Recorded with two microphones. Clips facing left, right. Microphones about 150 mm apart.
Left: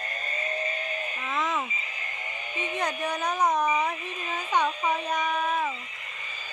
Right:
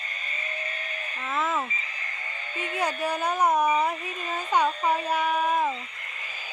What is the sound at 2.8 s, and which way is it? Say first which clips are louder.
A woman's voice: right 3 dB; 10° right (ahead or behind).